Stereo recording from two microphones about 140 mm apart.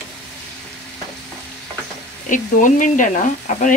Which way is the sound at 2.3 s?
65° left (ahead or behind).